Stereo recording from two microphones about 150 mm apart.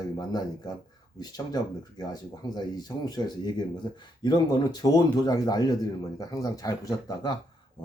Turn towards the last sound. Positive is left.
turn(degrees=25)  # may be behind; listen again after turning